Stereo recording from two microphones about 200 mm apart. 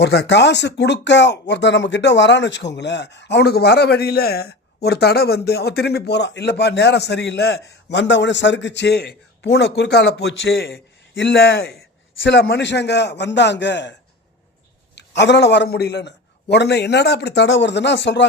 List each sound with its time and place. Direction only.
0.0 s speech: 55° left (ahead or behind)
14.9 s speech: 60° left (ahead or behind)